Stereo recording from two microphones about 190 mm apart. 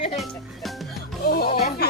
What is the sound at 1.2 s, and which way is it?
Music, 55° left (ahead or behind).